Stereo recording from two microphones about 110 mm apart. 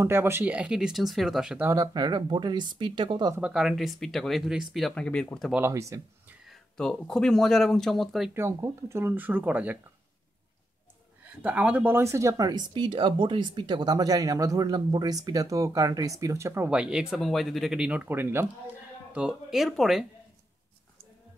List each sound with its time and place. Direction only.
0.0 s speech: 20° right (ahead or behind); by 1.6 s 5° right (ahead or behind)
1.8 s speech: 40° right (ahead or behind)
3.3 s speech: 10° right (ahead or behind); by 5.5 s 10° left (ahead or behind)
5.6 s speech: 25° right (ahead or behind)
6.4 s speech: centre (ahead or behind)
8.3 s speech: 25° right (ahead or behind)
11.4 s speech: 15° right (ahead or behind)
16.7 s speech: 5° right (ahead or behind)
19.1 s speech: 5° right (ahead or behind)